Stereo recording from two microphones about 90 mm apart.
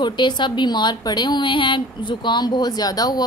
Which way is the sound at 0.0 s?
55° left (ahead or behind).